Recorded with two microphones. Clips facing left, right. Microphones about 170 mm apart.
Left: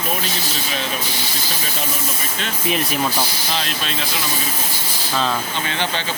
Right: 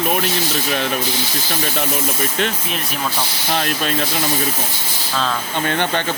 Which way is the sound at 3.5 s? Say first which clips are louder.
Right 9 dB; 55° right (ahead or behind).